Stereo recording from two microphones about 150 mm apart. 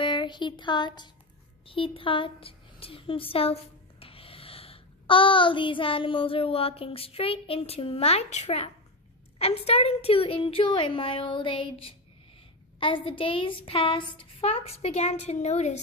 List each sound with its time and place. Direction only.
0.0 s a child's voice: 30° left (ahead or behind); by 15.8 s 50° left (ahead or behind)